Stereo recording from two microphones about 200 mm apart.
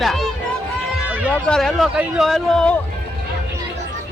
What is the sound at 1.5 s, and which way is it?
Speech, centre (ahead or behind).